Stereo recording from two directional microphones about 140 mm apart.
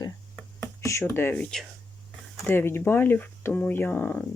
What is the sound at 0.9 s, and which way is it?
Speech, 20° left (ahead or behind).